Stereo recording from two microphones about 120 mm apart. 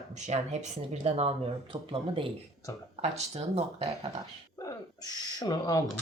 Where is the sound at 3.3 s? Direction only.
60° right (ahead or behind).